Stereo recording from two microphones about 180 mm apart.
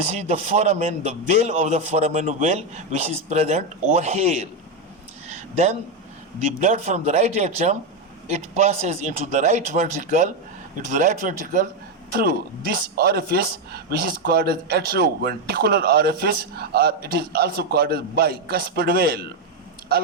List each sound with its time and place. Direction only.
0.0 s a man's voice: 40° right (ahead or behind)
6.4 s a man's voice: 40° right (ahead or behind); by 19.3 s 60° right (ahead or behind)